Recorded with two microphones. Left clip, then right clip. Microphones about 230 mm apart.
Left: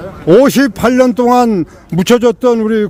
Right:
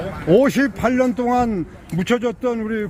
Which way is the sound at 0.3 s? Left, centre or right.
Left.